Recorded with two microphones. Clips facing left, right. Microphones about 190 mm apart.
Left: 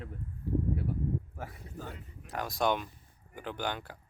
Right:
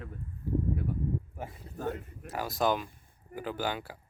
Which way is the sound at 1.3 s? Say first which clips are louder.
Right 2 dB; 20° right (ahead or behind).